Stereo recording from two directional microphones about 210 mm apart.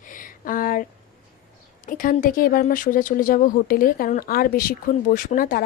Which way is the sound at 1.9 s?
40° left (ahead or behind).